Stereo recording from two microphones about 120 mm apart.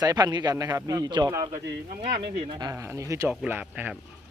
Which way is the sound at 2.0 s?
50° right (ahead or behind).